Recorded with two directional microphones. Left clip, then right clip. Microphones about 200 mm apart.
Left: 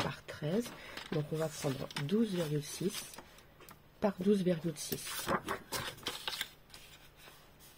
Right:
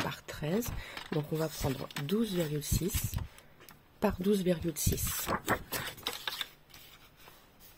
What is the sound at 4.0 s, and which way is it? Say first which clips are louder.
Speech: right 1 dB; 20° right (ahead or behind).